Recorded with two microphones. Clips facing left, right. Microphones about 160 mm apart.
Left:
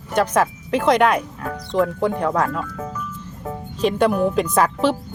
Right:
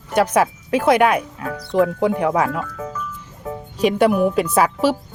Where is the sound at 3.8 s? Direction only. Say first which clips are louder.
Right 2 dB; 10° right (ahead or behind).